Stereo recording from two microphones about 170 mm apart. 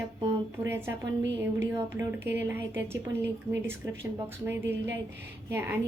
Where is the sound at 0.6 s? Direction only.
15° right (ahead or behind).